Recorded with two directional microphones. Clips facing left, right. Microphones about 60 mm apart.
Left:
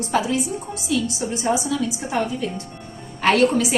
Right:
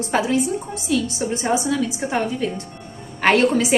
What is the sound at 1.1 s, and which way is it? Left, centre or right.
A woman's voice, right.